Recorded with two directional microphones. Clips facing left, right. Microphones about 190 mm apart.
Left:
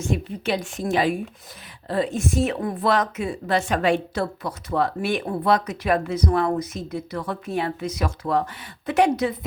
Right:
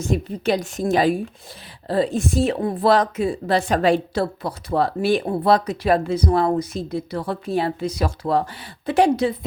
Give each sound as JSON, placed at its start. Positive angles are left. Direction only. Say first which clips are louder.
{"t": 0.0, "sound": "a woman's voice", "louder": "right 4 dB", "side_deg": -40}